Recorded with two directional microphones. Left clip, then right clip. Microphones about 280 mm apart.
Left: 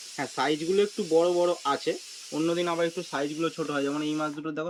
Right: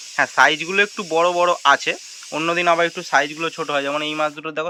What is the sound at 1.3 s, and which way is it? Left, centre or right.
Speech, right.